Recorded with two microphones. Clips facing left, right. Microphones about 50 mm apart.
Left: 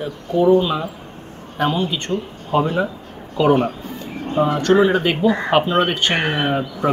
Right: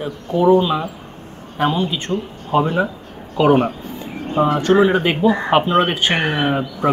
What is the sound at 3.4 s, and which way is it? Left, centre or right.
Speech, centre.